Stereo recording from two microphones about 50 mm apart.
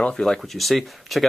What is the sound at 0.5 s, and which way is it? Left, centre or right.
Speech, centre.